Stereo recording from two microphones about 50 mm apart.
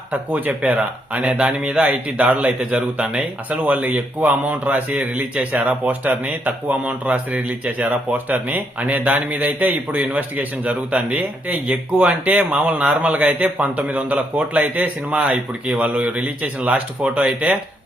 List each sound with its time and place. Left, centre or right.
0.6 s speech: right
1.9 s speech: right